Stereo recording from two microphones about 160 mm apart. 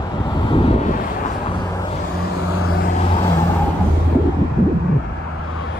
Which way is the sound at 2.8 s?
45° left (ahead or behind).